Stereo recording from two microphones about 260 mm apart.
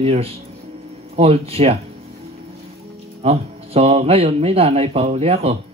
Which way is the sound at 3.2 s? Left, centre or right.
Right.